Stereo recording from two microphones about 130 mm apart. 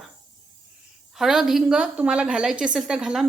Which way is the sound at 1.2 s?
5° right (ahead or behind).